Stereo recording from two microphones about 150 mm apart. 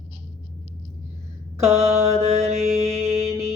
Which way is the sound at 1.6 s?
45° right (ahead or behind).